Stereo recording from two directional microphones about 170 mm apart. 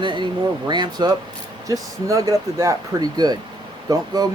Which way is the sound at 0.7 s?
25° right (ahead or behind).